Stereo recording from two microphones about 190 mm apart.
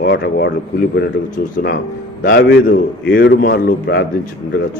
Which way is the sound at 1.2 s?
55° left (ahead or behind).